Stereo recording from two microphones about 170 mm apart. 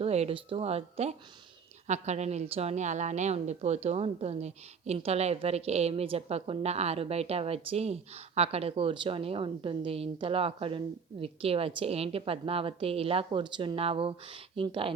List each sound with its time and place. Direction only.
0.0 s a woman's voice: 35° right (ahead or behind)